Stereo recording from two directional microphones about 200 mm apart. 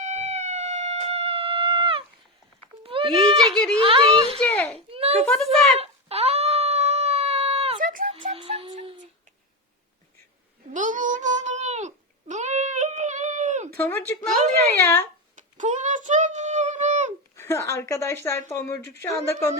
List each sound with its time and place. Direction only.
0.0 s a sound: 35° right (ahead or behind)
2.8 s goat: 25° right (ahead or behind)
3.3 s a woman's voice: 5° left (ahead or behind)
3.8 s a sound: 25° right (ahead or behind)
4.4 s baby cry: 10° left (ahead or behind)
4.9 s a sound: 30° right (ahead or behind)
5.3 s a woman's voice: centre (ahead or behind)
5.8 s dog: 30° right (ahead or behind)
8.4 s music: 25° right (ahead or behind)
10.7 s babbling: 40° right (ahead or behind)
13.7 s speech: 10° left (ahead or behind)
15.4 s a sound: 40° right (ahead or behind)
17.3 s speech: 15° left (ahead or behind)